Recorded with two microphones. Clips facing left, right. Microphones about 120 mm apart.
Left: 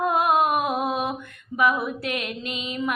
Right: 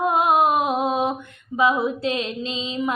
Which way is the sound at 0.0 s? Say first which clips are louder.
Right 2 dB; 20° right (ahead or behind).